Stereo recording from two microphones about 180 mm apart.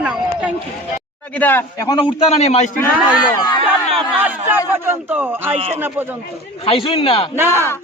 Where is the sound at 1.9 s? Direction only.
30° left (ahead or behind).